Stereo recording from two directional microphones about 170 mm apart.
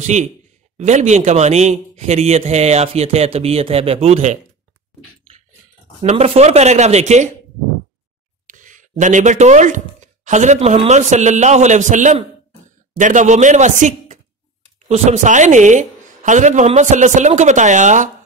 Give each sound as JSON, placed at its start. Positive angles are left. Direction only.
{"t": 0.0, "sound": "a man's voice", "side_deg": -45}
{"t": 6.0, "sound": "a man's voice", "side_deg": -40}
{"t": 8.5, "sound": "a man's voice", "side_deg": -50}